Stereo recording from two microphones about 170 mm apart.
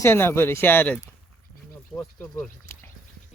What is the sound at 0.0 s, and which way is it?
Speech, 15° left (ahead or behind).